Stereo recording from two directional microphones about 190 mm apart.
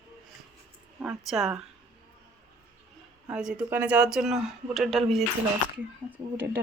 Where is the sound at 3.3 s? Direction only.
5° right (ahead or behind).